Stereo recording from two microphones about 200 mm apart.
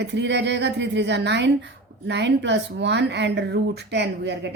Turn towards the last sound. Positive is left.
turn(degrees=-60)  # may be behind; listen again after turning